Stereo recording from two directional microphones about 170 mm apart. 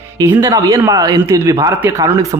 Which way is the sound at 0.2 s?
15° right (ahead or behind).